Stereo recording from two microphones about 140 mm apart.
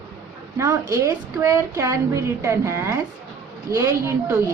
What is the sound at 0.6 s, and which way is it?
A woman's voice, 25° right (ahead or behind).